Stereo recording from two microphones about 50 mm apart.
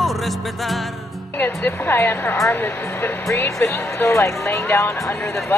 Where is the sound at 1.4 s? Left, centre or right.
Left.